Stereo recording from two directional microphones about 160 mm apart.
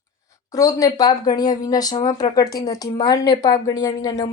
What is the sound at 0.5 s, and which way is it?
A woman's voice, 20° left (ahead or behind).